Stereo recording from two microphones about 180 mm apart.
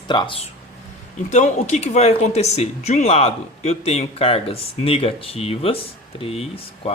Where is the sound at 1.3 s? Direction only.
40° left (ahead or behind).